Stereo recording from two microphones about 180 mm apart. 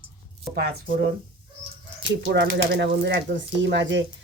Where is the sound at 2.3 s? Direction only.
75° right (ahead or behind).